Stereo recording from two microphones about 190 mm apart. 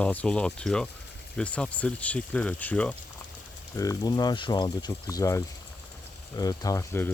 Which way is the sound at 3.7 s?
20° left (ahead or behind).